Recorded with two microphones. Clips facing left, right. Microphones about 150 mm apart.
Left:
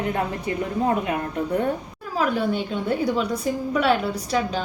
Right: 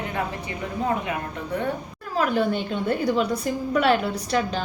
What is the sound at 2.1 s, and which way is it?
A woman's voice, 5° left (ahead or behind).